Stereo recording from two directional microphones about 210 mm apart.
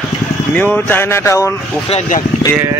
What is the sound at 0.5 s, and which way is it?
Speech, 10° left (ahead or behind).